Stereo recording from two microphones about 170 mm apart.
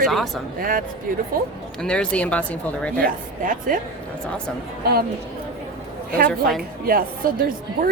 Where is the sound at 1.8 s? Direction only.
5° left (ahead or behind).